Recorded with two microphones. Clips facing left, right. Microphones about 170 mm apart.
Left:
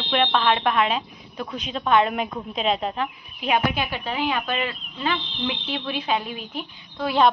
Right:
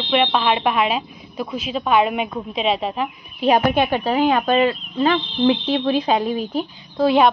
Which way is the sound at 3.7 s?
55° right (ahead or behind).